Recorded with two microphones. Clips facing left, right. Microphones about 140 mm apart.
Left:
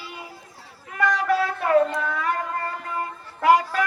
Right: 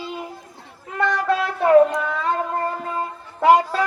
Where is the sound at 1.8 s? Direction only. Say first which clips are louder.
Right 3 dB; 20° right (ahead or behind).